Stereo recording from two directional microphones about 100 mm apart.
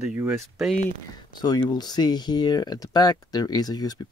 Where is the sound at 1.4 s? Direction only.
45° left (ahead or behind).